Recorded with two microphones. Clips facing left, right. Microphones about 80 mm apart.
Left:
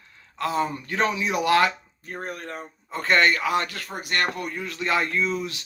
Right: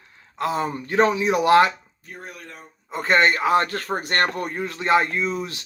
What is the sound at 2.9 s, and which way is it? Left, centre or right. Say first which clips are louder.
Speech: right 2 dB; right.